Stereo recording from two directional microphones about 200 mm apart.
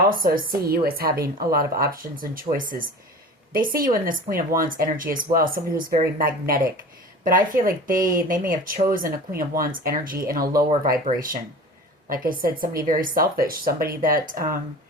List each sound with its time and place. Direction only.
0.1 s speech: 45° right (ahead or behind)